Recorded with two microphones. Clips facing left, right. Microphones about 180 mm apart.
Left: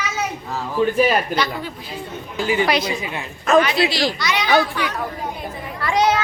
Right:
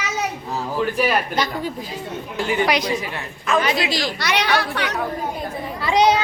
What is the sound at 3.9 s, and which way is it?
A child's voice, 55° right (ahead or behind).